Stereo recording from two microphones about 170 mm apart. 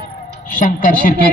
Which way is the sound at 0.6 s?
55° left (ahead or behind).